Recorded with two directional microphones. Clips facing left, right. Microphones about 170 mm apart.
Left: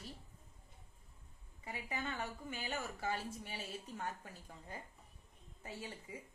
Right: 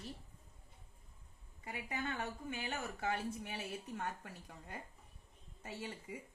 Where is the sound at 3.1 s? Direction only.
65° right (ahead or behind).